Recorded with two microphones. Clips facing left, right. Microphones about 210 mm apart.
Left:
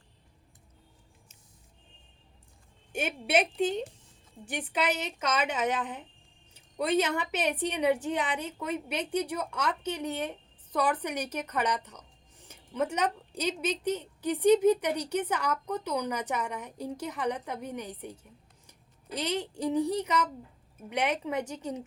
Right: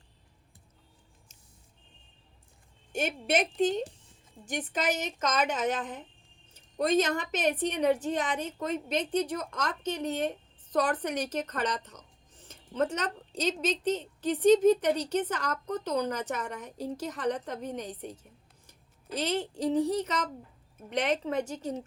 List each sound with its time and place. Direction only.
3.1 s a woman's voice: 10° left (ahead or behind)